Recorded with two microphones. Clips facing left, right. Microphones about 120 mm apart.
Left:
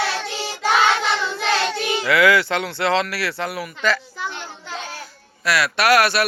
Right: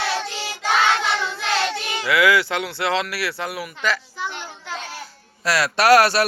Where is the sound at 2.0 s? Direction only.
10° right (ahead or behind).